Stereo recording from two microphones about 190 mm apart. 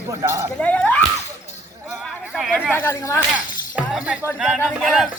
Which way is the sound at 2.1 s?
Centre (ahead or behind).